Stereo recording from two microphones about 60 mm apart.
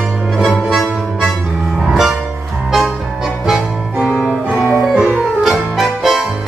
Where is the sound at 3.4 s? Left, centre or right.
Centre.